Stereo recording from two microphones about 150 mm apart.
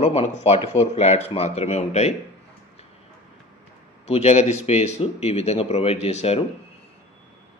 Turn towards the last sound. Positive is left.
turn(degrees=45)  # may be behind; listen again after turning